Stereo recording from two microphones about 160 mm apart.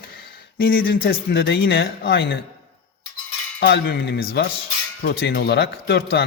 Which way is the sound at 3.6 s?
90° left.